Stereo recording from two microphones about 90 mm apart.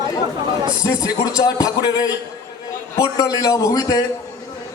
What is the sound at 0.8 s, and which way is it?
A man's voice, 40° left (ahead or behind).